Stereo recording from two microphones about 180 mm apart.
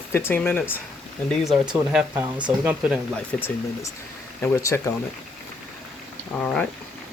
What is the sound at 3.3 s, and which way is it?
Speech, 10° left (ahead or behind).